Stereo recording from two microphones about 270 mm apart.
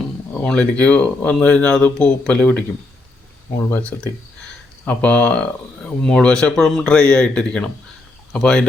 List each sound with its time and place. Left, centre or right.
0.4 s speech: centre
3.7 s speech: centre